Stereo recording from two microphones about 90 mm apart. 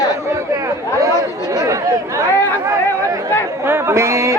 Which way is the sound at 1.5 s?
40° right (ahead or behind).